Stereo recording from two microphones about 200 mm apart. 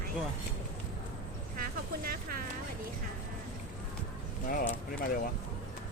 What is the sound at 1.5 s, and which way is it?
Speech, 45° right (ahead or behind).